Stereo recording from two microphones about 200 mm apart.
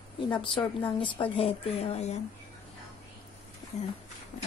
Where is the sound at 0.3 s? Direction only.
25° left (ahead or behind).